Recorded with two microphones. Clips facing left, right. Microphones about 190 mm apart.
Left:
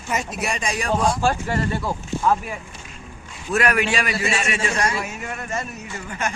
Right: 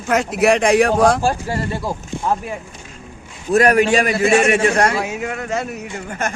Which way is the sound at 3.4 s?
40° right (ahead or behind).